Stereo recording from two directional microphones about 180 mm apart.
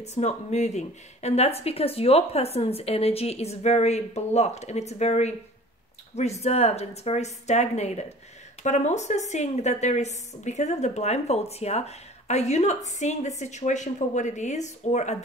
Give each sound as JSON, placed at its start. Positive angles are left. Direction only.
{"t": 0.0, "sound": "a woman's voice", "side_deg": 40}